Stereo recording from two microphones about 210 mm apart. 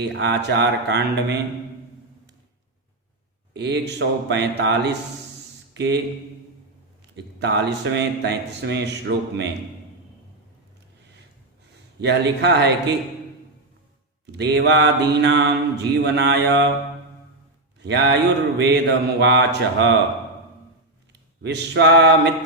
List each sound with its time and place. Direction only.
0.0 s speech: 55° right (ahead or behind)
3.5 s mantra: 55° right (ahead or behind)
5.7 s speech: 55° right (ahead or behind)
7.2 s mantra: 55° right (ahead or behind)
11.9 s speech: 55° right (ahead or behind)
14.3 s mantra: 55° right (ahead or behind)
17.7 s mantra: 55° right (ahead or behind)
19.2 s speech: 55° right (ahead or behind)
21.1 s speech: 55° right (ahead or behind)